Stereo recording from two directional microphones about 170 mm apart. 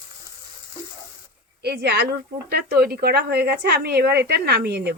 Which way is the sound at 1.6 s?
75° right (ahead or behind).